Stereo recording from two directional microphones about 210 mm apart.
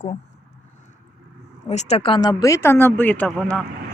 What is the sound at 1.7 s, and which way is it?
Speech, 30° left (ahead or behind).